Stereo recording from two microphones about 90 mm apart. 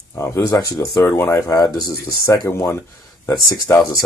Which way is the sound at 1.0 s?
20° left (ahead or behind).